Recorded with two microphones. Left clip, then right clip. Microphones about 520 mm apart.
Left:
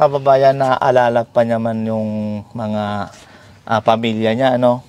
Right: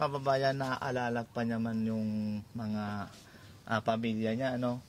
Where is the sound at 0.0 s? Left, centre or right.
Centre.